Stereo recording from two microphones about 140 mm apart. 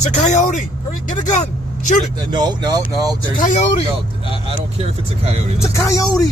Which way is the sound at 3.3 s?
65° left (ahead or behind).